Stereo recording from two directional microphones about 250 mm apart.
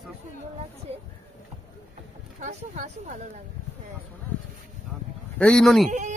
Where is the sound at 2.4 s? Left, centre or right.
Right.